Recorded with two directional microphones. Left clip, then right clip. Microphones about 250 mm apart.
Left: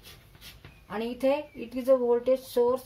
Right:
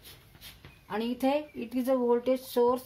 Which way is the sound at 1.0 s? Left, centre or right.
Right.